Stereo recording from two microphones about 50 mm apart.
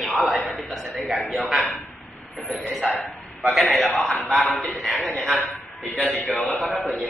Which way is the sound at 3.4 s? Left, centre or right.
Centre.